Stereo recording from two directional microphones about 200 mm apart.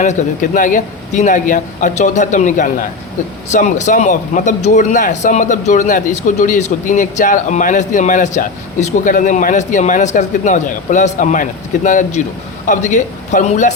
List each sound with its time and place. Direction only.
0.0 s a man's voice: 40° left (ahead or behind)